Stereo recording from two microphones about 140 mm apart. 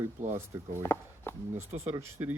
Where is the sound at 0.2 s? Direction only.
60° right (ahead or behind).